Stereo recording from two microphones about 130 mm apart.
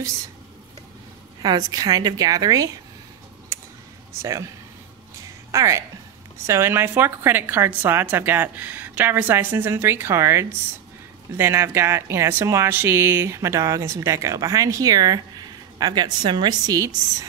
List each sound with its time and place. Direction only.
1.4 s speech: 30° right (ahead or behind)
4.2 s speech: 25° right (ahead or behind)
5.5 s a woman's voice: 25° right (ahead or behind)